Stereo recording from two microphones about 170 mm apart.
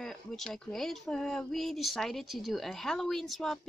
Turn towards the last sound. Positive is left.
turn(degrees=0)  # may be behind; listen again after turning